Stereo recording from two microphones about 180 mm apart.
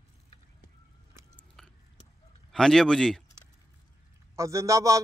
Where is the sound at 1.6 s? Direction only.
Centre (ahead or behind).